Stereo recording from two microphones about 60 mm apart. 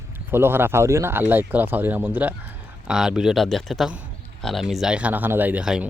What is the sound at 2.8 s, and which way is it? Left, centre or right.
Speech, centre.